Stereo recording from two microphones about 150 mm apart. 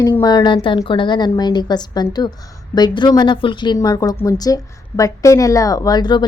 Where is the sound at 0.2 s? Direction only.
25° left (ahead or behind).